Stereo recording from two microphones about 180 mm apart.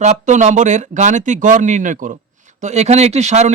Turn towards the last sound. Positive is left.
turn(degrees=-40)  # may be behind; listen again after turning